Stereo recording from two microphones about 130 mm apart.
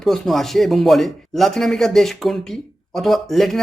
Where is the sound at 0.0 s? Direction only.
Centre (ahead or behind).